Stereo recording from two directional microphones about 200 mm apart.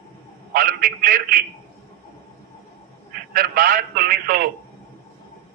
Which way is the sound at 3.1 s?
45° right (ahead or behind).